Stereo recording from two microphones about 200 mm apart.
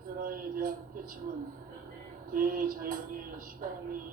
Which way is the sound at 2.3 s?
45° right (ahead or behind).